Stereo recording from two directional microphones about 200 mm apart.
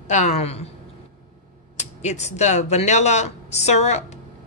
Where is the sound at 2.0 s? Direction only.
35° left (ahead or behind).